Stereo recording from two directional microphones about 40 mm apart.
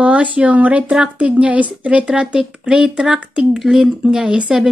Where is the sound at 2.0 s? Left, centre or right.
Right.